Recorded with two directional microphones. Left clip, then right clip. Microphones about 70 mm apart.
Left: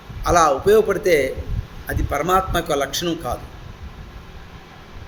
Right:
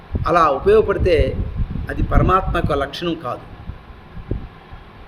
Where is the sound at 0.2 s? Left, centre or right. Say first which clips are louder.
Right 1 dB; right.